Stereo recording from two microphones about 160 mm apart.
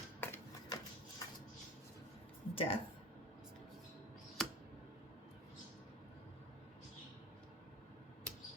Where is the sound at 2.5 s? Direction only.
35° left (ahead or behind).